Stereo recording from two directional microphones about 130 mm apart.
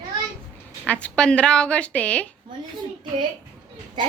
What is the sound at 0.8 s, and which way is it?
A woman's voice, 10° left (ahead or behind).